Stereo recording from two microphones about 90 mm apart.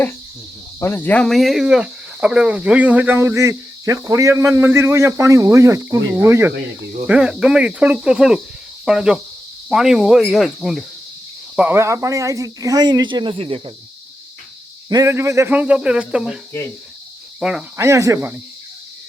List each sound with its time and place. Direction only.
0.8 s cricket: 20° left (ahead or behind)
1.2 s speech: centre (ahead or behind); by 3.2 s 15° right (ahead or behind)
3.2 s a man's voice: 30° right (ahead or behind)
7.1 s speech: 10° right (ahead or behind)
11.7 s speech: 30° right (ahead or behind); by 13.7 s 90° right
15.0 s a man's voice: 30° right (ahead or behind)
15.4 s speech: 15° right (ahead or behind)
17.4 s speech: 5° right (ahead or behind)
17.7 s a man's voice: 35° right (ahead or behind)